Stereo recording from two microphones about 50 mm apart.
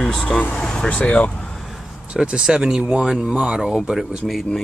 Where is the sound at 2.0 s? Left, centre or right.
Centre.